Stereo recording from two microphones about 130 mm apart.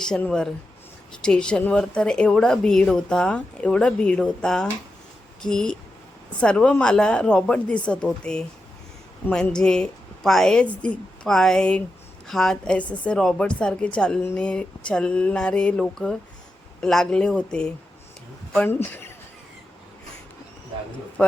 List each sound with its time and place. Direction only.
0.0 s a woman's voice: 5° left (ahead or behind)
21.2 s a woman's voice: 10° left (ahead or behind)